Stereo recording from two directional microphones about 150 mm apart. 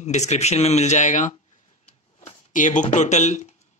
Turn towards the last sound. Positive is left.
turn(degrees=50)  # may be behind; listen again after turning